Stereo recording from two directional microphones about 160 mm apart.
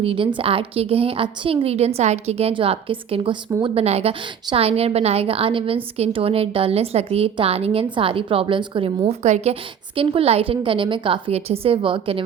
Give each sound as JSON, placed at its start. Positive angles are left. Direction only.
{"t": 0.0, "sound": "a woman's voice", "side_deg": -35}